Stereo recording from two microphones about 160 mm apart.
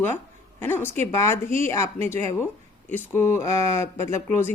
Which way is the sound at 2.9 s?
15° left (ahead or behind).